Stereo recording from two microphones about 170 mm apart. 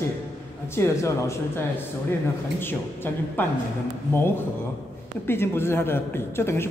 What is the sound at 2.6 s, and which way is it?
Speech, 10° left (ahead or behind).